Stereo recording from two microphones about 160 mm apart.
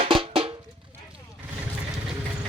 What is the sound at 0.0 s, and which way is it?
Music, 35° right (ahead or behind).